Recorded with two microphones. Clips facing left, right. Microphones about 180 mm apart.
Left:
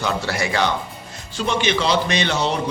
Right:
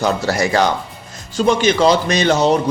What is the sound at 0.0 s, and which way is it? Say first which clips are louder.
A man's voice: right 6 dB; 40° right (ahead or behind).